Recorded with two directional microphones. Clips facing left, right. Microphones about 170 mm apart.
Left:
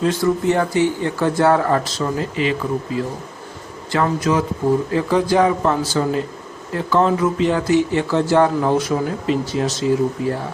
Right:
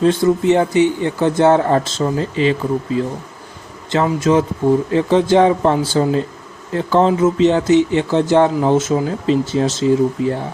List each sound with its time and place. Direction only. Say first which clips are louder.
0.0 s speech: right 4 dB; 25° right (ahead or behind)